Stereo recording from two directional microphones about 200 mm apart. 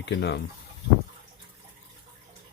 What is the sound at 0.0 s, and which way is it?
Speech, 55° left (ahead or behind).